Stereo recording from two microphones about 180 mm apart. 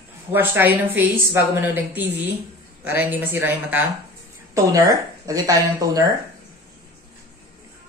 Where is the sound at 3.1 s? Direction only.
10° right (ahead or behind).